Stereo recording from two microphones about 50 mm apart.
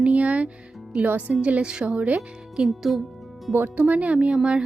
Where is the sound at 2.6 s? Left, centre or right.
Centre.